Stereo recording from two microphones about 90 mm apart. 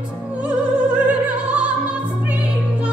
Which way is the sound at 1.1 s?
15° right (ahead or behind).